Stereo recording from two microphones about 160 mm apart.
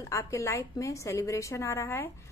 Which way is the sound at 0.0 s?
20° left (ahead or behind).